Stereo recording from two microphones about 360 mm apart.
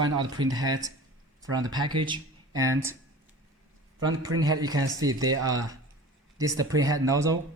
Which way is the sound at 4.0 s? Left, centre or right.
Centre.